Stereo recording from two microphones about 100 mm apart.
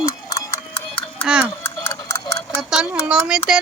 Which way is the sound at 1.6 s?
25° left (ahead or behind).